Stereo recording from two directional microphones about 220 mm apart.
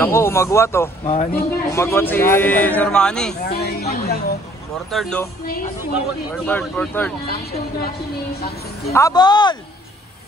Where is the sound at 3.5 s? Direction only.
45° left (ahead or behind).